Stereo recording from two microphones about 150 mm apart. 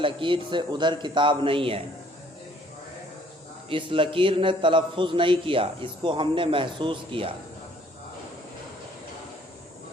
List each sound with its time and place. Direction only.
0.0 s a man's voice: 35° right (ahead or behind)
3.7 s a man's voice: 35° right (ahead or behind)